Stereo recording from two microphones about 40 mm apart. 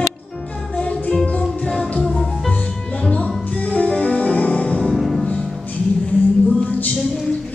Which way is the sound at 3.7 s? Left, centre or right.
Left.